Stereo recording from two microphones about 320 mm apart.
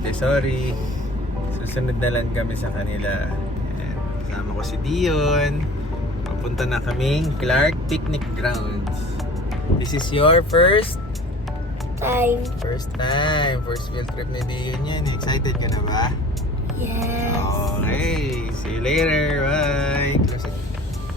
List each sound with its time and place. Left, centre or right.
0.1 s music: centre
4.9 s music: centre
6.6 s music: centre
9.8 s speech: centre
11.9 s music: centre
12.7 s speech: centre
16.8 s music: centre
17.8 s music: centre